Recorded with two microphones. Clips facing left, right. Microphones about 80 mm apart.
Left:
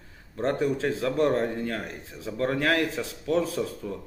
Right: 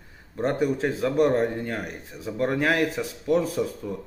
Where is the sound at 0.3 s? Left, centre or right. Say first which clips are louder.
Right 2 dB; centre.